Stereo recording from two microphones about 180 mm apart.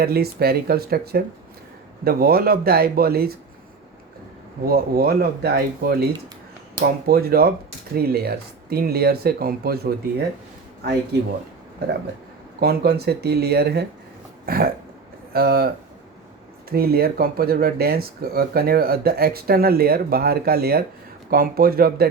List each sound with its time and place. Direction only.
0.0 s speech: 60° right (ahead or behind)
4.6 s speech: 55° right (ahead or behind)
12.5 s speech: 60° right (ahead or behind)
14.4 s a sound: 55° right (ahead or behind)
15.3 s speech: 60° right (ahead or behind)